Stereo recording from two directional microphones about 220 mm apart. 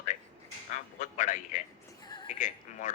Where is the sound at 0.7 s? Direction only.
35° left (ahead or behind).